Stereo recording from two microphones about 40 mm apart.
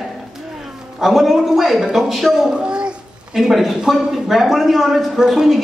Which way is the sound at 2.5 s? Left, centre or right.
Right.